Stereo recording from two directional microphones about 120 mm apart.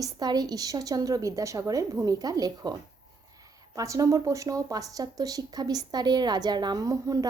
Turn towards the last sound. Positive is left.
turn(degrees=-30)  # may be behind; listen again after turning